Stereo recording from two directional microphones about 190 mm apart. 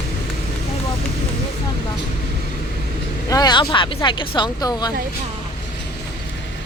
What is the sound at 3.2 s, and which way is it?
Speech, 20° left (ahead or behind).